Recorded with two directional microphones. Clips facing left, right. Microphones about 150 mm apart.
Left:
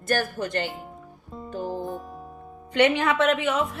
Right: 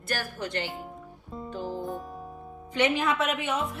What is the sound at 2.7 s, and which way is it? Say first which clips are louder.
Speech: left 5 dB; 70° left (ahead or behind).